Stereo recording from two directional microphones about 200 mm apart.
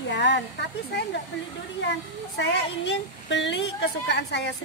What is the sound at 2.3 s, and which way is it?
A woman's voice, 65° left (ahead or behind).